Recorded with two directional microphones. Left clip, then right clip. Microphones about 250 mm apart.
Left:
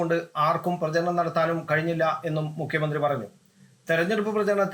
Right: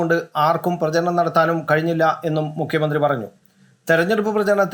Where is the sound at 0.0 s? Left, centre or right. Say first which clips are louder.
Right 6 dB; centre.